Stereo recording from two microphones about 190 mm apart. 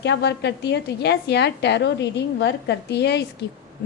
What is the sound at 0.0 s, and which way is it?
A woman's voice, 65° left (ahead or behind).